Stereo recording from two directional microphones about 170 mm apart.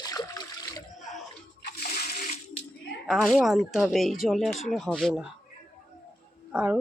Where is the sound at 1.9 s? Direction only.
50° left (ahead or behind).